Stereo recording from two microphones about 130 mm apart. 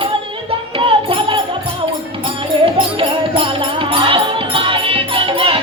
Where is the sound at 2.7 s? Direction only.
40° right (ahead or behind).